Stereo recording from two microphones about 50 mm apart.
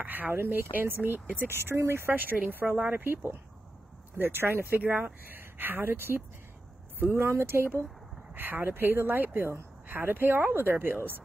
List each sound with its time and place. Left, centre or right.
0.0 s speech: right
0.4 s speech: right
0.7 s speech: right
1.4 s speech: right
4.2 s speech: right
7.2 s speech: right
8.4 s speech: right